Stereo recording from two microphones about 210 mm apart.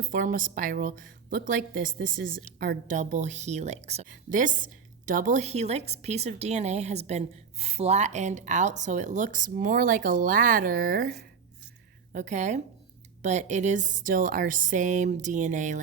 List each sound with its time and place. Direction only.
0.0 s a woman's voice: 40° right (ahead or behind)